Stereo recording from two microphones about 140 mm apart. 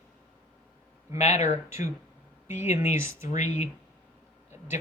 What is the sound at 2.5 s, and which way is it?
Speech, 15° right (ahead or behind).